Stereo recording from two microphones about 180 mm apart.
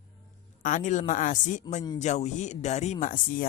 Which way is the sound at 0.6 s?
45° left (ahead or behind).